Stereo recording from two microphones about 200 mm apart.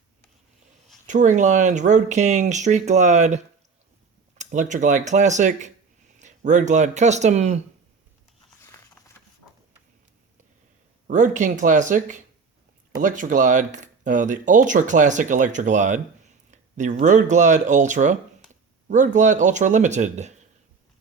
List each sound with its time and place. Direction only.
1.0 s speech: 40° right (ahead or behind)
11.1 s speech: 40° right (ahead or behind)